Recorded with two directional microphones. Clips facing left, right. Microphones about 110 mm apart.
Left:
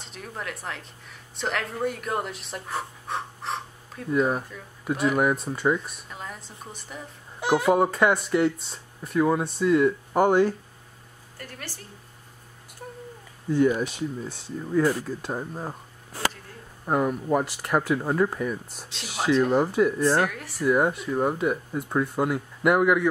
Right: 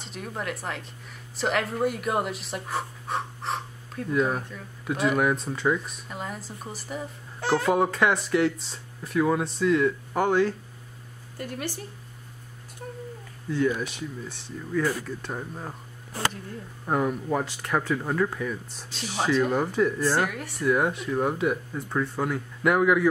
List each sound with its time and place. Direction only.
0.0 s speech: centre (ahead or behind)
7.3 s speech: 15° left (ahead or behind)
7.7 s speech: centre (ahead or behind)
11.3 s speech: 20° right (ahead or behind)
13.6 s speech: 15° left (ahead or behind)
16.8 s speech: 5° left (ahead or behind)
18.9 s speech: centre (ahead or behind)
21.8 s speech: 15° left (ahead or behind)